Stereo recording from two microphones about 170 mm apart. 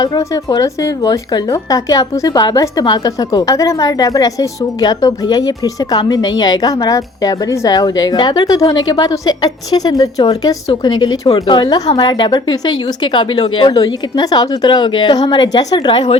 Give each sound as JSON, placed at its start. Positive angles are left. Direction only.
{"t": 0.0, "sound": "a woman's voice", "side_deg": 20}